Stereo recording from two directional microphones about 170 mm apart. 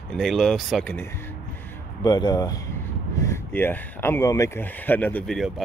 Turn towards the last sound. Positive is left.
turn(degrees=10)  # may be behind; listen again after turning